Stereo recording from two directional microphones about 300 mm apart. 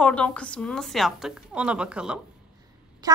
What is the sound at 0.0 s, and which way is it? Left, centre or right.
A woman's voice, centre.